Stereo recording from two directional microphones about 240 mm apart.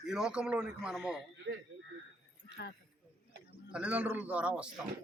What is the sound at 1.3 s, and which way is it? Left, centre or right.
Speech, right.